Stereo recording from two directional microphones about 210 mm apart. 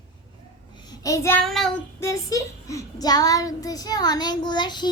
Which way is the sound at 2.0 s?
15° left (ahead or behind).